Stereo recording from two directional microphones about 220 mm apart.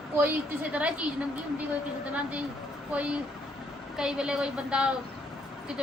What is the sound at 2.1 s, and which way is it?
A woman's voice, 5° right (ahead or behind).